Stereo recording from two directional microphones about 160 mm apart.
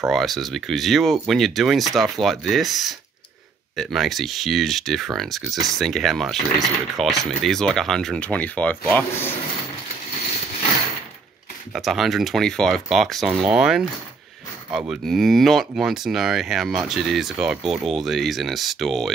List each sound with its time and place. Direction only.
0.1 s speech: centre (ahead or behind)
11.7 s speech: centre (ahead or behind)